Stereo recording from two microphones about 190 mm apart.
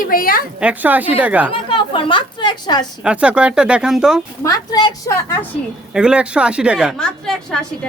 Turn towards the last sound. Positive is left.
turn(degrees=5)  # may be behind; listen again after turning